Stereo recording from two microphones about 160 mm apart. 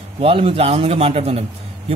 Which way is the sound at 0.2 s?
35° right (ahead or behind).